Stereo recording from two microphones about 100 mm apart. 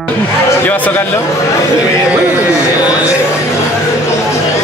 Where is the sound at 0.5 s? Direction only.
20° left (ahead or behind).